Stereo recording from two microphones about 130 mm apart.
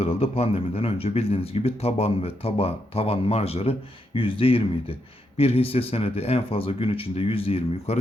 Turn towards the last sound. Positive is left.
turn(degrees=50)  # may be behind; listen again after turning